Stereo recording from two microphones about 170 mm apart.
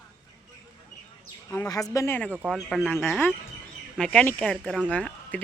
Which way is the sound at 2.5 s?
Centre (ahead or behind).